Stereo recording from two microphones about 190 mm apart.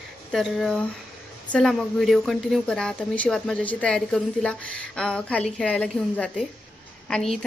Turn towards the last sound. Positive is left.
turn(degrees=0)  # may be behind; listen again after turning